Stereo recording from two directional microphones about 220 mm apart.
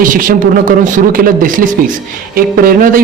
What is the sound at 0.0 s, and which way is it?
A man's voice, 40° right (ahead or behind).